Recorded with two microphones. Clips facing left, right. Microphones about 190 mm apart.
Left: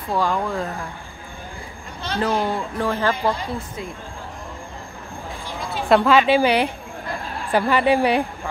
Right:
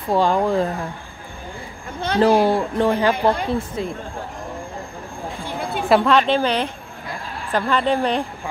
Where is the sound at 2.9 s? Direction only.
15° right (ahead or behind).